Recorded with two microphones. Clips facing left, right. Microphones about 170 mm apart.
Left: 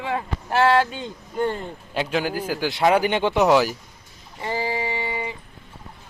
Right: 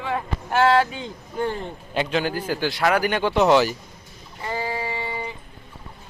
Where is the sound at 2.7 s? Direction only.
20° left (ahead or behind).